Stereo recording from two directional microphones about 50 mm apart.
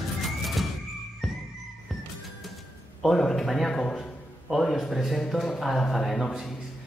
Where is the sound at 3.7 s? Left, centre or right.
Centre.